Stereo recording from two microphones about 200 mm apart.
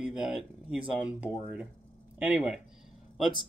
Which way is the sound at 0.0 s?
5° right (ahead or behind).